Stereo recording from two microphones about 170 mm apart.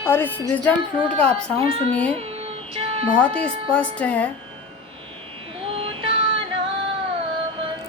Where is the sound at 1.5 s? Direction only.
35° right (ahead or behind).